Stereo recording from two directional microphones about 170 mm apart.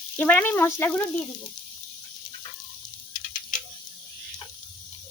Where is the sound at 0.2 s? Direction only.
10° left (ahead or behind).